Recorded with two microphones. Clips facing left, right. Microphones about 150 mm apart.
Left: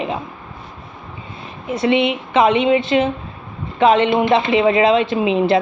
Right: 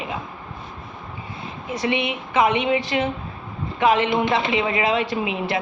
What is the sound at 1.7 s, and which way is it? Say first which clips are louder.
A woman's voice: left 7 dB; 25° left (ahead or behind).